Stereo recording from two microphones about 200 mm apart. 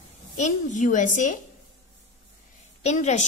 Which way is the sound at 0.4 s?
40° left (ahead or behind).